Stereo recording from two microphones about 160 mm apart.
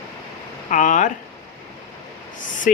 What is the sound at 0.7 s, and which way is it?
Speech, 50° left (ahead or behind).